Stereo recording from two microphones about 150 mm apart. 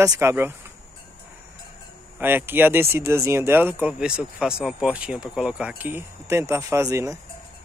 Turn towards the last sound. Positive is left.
turn(degrees=-20)  # may be behind; listen again after turning